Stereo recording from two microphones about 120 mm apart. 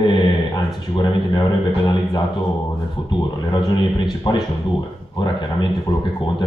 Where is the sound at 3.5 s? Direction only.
40° left (ahead or behind).